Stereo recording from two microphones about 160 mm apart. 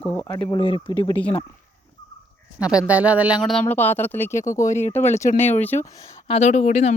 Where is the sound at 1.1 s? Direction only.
10° left (ahead or behind).